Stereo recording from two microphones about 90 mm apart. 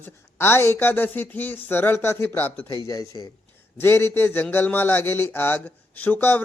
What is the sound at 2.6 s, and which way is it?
Speech, 50° right (ahead or behind).